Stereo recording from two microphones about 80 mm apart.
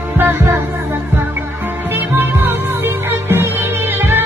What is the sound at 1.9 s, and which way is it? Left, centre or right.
Music, right.